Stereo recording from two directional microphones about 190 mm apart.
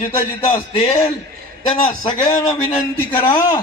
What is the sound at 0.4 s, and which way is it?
Speech, 35° left (ahead or behind).